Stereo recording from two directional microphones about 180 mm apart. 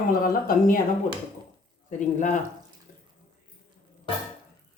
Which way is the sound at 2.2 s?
45° left (ahead or behind).